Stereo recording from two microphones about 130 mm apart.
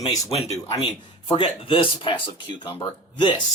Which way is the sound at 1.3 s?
40° left (ahead or behind).